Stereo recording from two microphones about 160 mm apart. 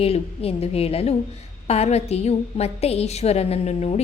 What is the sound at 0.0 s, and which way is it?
A woman's voice, 40° left (ahead or behind).